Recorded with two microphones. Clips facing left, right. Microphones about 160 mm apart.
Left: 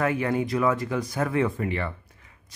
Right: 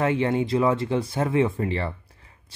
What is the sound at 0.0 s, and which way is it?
Speech, 25° right (ahead or behind).